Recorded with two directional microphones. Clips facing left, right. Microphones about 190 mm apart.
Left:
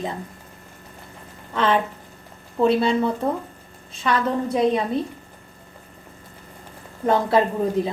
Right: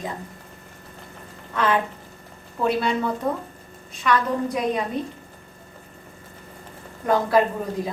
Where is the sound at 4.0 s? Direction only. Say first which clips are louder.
Even; 30° left (ahead or behind).